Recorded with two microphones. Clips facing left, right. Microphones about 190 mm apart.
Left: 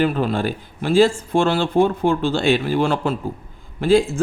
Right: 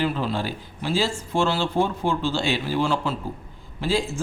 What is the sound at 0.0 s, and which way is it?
A man's voice, 55° left (ahead or behind).